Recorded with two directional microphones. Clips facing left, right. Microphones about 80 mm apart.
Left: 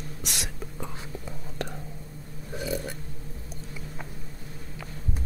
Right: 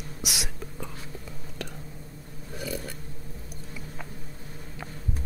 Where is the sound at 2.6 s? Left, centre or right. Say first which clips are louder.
Left 3 dB; left.